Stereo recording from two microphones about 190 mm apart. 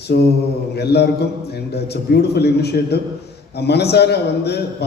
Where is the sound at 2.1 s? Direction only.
60° left (ahead or behind).